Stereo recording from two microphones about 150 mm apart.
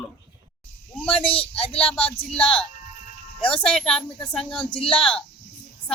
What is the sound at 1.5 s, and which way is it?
A man's voice, 40° left (ahead or behind).